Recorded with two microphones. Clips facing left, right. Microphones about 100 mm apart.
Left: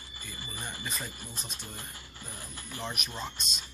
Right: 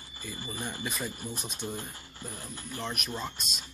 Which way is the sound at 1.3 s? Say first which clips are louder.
Right 7 dB; 15° right (ahead or behind).